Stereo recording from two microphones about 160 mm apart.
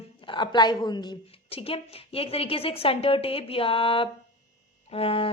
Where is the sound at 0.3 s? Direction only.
30° left (ahead or behind).